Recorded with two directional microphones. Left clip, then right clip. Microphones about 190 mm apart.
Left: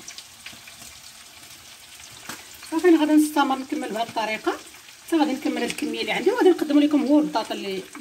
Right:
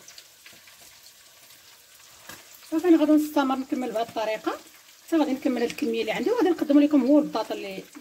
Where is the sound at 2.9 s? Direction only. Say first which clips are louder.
Right 1 dB; 50° right (ahead or behind).